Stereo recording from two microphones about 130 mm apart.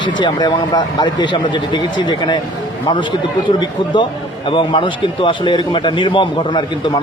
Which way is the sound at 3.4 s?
40° left (ahead or behind).